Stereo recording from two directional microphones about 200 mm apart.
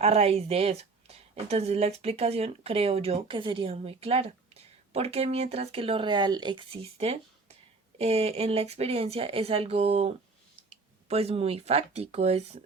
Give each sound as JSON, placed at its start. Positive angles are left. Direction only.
{"t": 0.0, "sound": "a woman's voice", "side_deg": -30}